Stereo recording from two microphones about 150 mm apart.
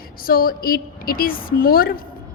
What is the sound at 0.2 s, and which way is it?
A woman's voice, 75° left (ahead or behind).